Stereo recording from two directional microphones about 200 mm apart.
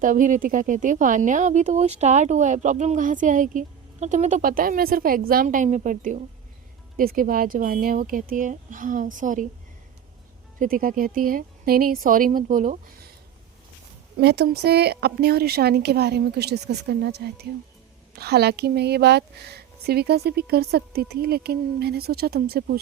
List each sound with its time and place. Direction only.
0.0 s speech: 40° right (ahead or behind)
10.6 s speech: 45° right (ahead or behind)
14.2 s speech: 55° right (ahead or behind)